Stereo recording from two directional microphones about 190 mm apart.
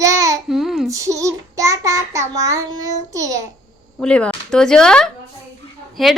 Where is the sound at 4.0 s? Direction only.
5° left (ahead or behind).